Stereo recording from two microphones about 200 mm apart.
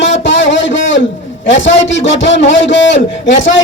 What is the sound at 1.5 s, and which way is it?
A man's voice, 65° left (ahead or behind).